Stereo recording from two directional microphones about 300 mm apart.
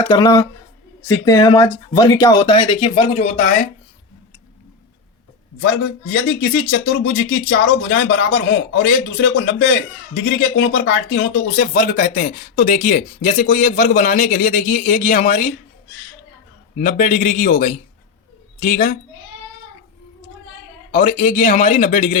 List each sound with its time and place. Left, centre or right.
0.0 s speech: centre
5.5 s speech: left
16.7 s speech: left
20.9 s speech: left